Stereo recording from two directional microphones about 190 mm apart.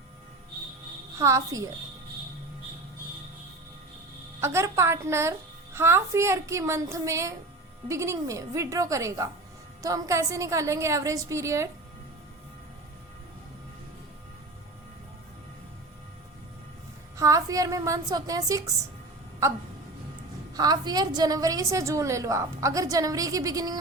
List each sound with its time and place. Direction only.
1.2 s a woman's voice: 15° right (ahead or behind)
4.4 s a woman's voice: 15° right (ahead or behind)
17.2 s a woman's voice: 15° right (ahead or behind)
20.5 s a woman's voice: 20° right (ahead or behind)